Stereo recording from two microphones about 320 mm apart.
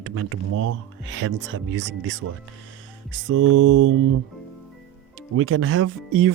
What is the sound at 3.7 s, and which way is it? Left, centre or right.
Speech, right.